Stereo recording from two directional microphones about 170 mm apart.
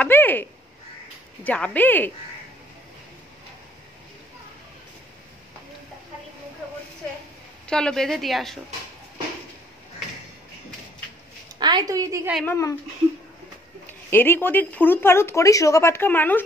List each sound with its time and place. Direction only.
0.0 s a sound: 10° left (ahead or behind)
1.4 s speech: 10° left (ahead or behind)
7.6 s a woman's voice: 5° left (ahead or behind)
11.6 s a woman's voice: 25° right (ahead or behind)
12.4 s speech: 15° left (ahead or behind)
14.1 s speech: 10° left (ahead or behind)